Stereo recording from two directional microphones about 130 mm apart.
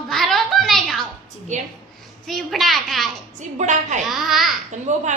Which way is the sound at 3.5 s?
70° right (ahead or behind).